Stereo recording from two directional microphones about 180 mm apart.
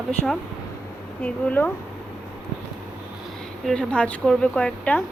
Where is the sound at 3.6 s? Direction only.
5° left (ahead or behind).